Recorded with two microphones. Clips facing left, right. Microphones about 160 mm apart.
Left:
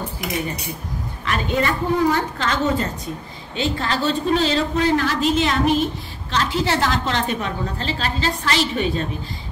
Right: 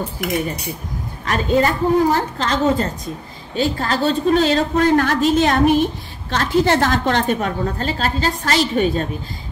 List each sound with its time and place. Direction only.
1.2 s a woman's voice: 40° right (ahead or behind)